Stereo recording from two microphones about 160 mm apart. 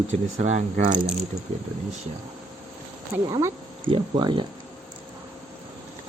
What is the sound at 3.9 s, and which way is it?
Babbling, 30° right (ahead or behind).